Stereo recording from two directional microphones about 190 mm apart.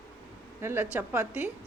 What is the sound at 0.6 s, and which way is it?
Speech, 15° right (ahead or behind).